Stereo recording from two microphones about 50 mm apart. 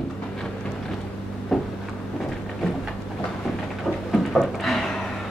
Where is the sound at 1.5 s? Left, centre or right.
Centre.